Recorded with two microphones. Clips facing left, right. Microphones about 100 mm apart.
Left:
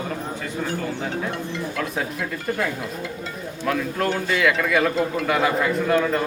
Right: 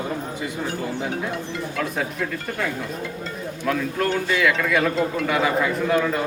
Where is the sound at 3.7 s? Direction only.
Centre (ahead or behind).